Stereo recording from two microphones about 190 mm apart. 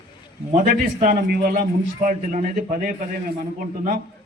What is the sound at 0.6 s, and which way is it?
A man's voice, 50° right (ahead or behind).